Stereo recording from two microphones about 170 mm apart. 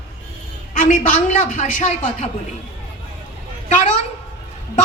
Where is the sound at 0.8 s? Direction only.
50° left (ahead or behind).